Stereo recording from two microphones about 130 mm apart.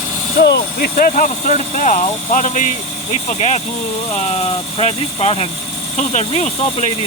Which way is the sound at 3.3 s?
60° left (ahead or behind).